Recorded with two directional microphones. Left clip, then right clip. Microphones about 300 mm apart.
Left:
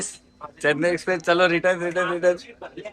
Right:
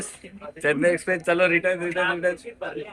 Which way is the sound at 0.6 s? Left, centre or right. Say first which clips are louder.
Even; centre.